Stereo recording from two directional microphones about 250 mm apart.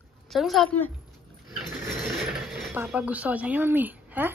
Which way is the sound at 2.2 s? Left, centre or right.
Centre.